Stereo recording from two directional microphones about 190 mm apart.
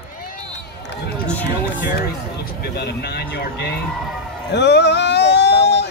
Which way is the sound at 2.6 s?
60° left (ahead or behind).